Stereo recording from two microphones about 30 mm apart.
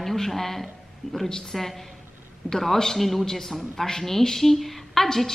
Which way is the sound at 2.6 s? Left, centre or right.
Centre.